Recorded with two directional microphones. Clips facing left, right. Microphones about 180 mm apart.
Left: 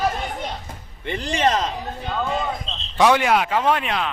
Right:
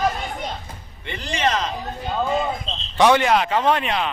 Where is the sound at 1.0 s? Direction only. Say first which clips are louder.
Left 3 dB; 40° left (ahead or behind).